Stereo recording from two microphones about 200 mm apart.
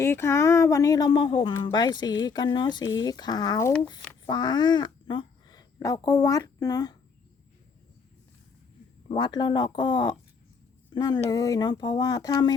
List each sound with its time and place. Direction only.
0.0 s speech: 15° left (ahead or behind)
9.0 s speech: 20° left (ahead or behind)